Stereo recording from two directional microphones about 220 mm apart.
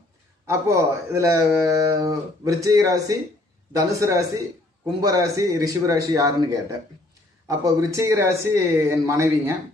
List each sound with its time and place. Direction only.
0.4 s speech: 15° right (ahead or behind)